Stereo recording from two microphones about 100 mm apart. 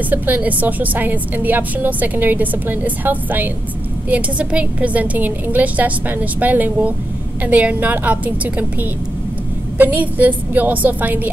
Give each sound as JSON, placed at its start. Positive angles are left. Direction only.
{"t": 0.1, "sound": "a woman's voice", "side_deg": -15}
{"t": 9.8, "sound": "a woman's voice", "side_deg": -15}